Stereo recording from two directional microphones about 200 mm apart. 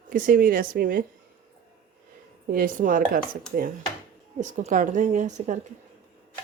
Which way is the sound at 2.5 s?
40° right (ahead or behind).